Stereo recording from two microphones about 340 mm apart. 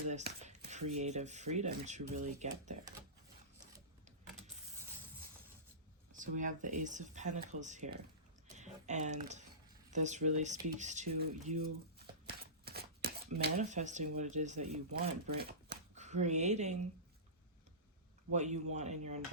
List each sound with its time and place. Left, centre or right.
0.1 s a sound: centre
0.9 s speech: centre
6.1 s speech: right
18.3 s speech: centre